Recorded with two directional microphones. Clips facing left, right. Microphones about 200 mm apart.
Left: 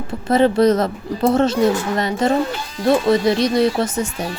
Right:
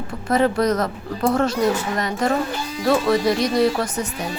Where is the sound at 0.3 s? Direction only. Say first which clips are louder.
Left 5 dB; 25° left (ahead or behind).